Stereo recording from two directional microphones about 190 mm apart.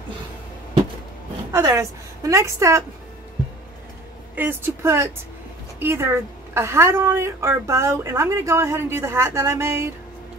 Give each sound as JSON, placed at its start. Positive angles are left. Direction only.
{"t": 1.5, "sound": "a woman's voice", "side_deg": -15}
{"t": 4.4, "sound": "a woman's voice", "side_deg": -10}